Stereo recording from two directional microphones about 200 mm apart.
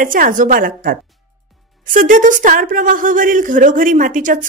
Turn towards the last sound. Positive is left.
turn(degrees=-40)  # may be behind; listen again after turning